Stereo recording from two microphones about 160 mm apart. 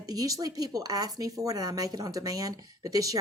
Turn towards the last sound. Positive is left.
turn(degrees=-20)  # may be behind; listen again after turning